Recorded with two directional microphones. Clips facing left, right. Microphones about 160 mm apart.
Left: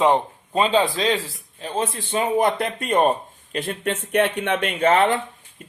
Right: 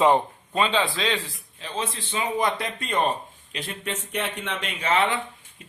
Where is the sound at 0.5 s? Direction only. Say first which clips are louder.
Left 4 dB; 40° left (ahead or behind).